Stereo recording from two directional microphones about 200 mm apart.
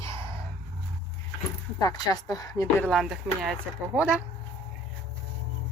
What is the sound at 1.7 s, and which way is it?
Speech, 20° left (ahead or behind).